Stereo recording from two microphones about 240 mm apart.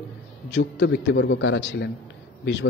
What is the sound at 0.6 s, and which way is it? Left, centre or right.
Speech, left.